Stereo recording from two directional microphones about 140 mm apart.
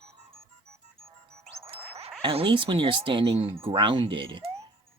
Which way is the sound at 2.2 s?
35° right (ahead or behind).